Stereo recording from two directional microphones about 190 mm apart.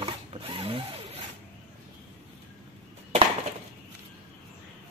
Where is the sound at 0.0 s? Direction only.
30° right (ahead or behind).